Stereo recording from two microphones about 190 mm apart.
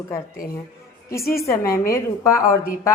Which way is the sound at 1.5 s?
15° left (ahead or behind).